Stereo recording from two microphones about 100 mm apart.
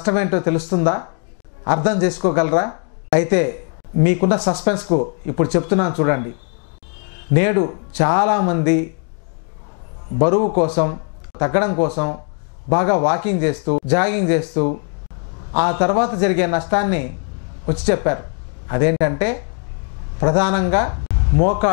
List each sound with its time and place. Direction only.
0.0 s a woman's voice: 15° left (ahead or behind)
7.3 s speech: 15° left (ahead or behind)
10.1 s a man's voice: 20° left (ahead or behind)